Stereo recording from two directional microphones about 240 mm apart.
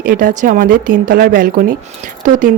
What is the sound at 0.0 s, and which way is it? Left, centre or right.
Speech, right.